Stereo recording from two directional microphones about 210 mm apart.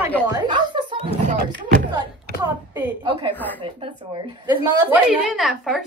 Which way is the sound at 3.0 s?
20° right (ahead or behind).